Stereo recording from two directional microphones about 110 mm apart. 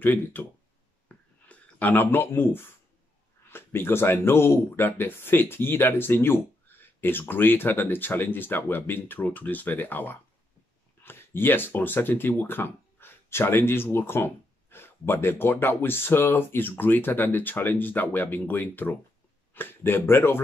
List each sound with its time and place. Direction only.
0.0 s speech: 15° left (ahead or behind)
1.0 s a sound: 15° left (ahead or behind)
3.4 s speech: 20° left (ahead or behind)